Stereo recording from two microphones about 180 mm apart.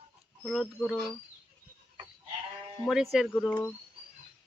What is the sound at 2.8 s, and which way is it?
Speech, centre (ahead or behind).